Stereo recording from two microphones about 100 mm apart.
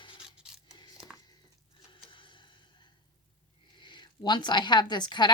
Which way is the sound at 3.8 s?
50° left (ahead or behind).